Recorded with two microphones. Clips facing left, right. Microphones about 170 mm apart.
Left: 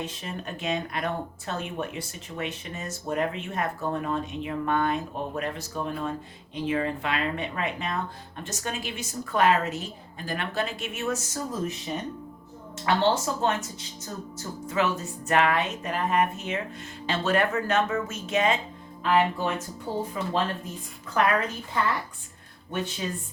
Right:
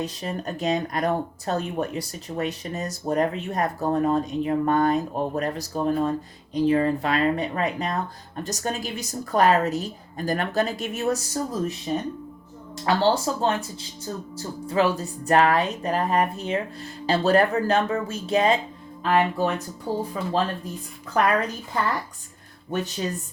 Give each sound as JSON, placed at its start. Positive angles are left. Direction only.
{"t": 0.0, "sound": "speech", "side_deg": -40}
{"t": 12.8, "sound": "speech", "side_deg": -35}
{"t": 21.2, "sound": "speech", "side_deg": -40}
{"t": 22.7, "sound": "speech", "side_deg": -40}